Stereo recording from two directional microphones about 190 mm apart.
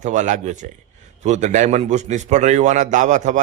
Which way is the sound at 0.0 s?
40° right (ahead or behind).